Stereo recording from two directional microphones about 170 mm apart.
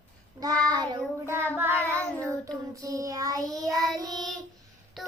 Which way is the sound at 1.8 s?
10° left (ahead or behind).